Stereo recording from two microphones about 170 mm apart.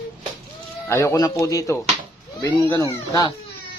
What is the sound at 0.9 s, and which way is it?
Speech, 15° left (ahead or behind).